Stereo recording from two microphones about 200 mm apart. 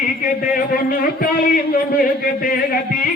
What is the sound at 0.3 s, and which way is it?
A man's voice, 45° left (ahead or behind).